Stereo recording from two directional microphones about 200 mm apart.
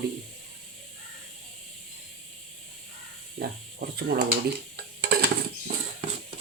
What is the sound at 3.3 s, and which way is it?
Speech, 50° right (ahead or behind).